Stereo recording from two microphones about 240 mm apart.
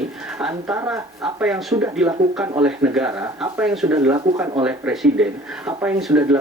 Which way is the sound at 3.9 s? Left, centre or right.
Centre.